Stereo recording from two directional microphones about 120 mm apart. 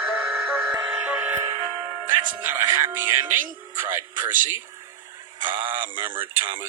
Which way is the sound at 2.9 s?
20° right (ahead or behind).